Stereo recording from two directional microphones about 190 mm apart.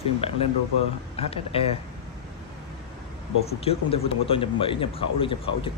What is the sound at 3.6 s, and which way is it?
A man's voice, 30° left (ahead or behind).